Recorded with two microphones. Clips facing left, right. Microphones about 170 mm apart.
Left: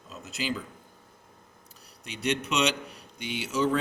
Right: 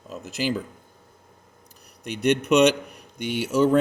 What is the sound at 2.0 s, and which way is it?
Speech, 55° right (ahead or behind).